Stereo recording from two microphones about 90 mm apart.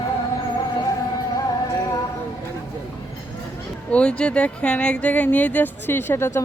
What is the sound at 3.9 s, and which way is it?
Speech, 10° left (ahead or behind).